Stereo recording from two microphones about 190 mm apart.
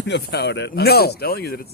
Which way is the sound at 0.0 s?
65° left (ahead or behind).